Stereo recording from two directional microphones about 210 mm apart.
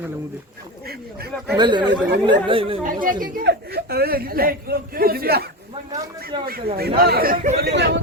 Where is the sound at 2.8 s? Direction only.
40° right (ahead or behind).